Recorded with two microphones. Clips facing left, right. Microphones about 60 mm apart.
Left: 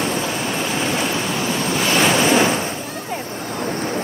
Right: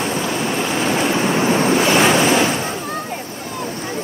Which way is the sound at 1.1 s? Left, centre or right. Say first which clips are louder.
Right 5 dB; right.